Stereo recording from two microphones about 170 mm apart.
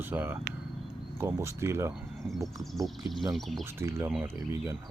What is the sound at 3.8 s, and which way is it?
Speech, 15° right (ahead or behind).